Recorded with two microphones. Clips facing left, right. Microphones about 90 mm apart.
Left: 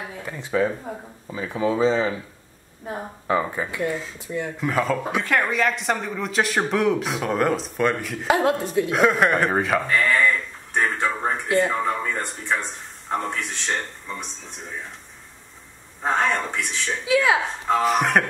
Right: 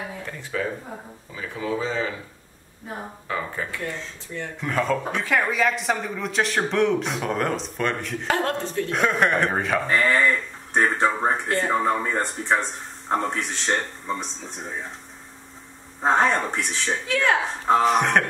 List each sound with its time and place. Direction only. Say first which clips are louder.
0.3 s speech: left 7 dB; 20° left (ahead or behind)
3.3 s speech: left 6 dB; 20° left (ahead or behind); by 9.8 s centre (ahead or behind)
9.8 s a man's voice: even; 35° right (ahead or behind)
10.7 s speech: right 2 dB; 25° right (ahead or behind)
11.4 s speech: left 4 dB; 5° left (ahead or behind)
11.8 s a man's voice: right 2 dB; 30° right (ahead or behind)
16.0 s speech: right 2 dB; 30° right (ahead or behind)
17.0 s speech: left 4 dB; 5° left (ahead or behind)